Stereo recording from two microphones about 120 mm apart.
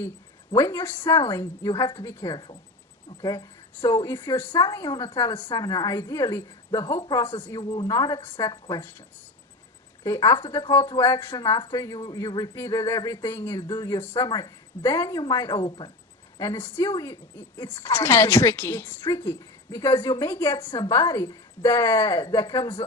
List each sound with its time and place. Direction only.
0.5 s a woman's voice: 25° left (ahead or behind)
4.6 s a woman's voice: 30° left (ahead or behind)
5.5 s a woman's voice: 35° left (ahead or behind)
7.6 s a woman's voice: 35° left (ahead or behind)
10.0 s a woman's voice: 25° left (ahead or behind)
13.7 s a woman's voice: 35° left (ahead or behind)
14.0 s speech: 15° left (ahead or behind)
14.3 s a woman's voice: 35° left (ahead or behind)
15.6 s speech: 45° left (ahead or behind)
16.4 s a woman's voice: 20° left (ahead or behind)
17.3 s a woman's voice: 15° left (ahead or behind)